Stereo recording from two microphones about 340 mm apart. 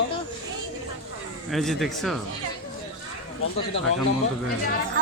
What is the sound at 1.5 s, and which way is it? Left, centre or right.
Speech, centre.